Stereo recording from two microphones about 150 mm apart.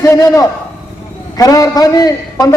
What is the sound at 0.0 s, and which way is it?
A man's voice, 25° left (ahead or behind).